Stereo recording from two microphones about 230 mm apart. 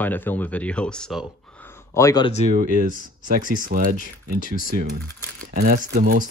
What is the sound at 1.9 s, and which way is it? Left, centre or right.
Speech, centre.